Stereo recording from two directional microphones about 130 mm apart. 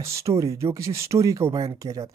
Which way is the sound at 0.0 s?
25° right (ahead or behind).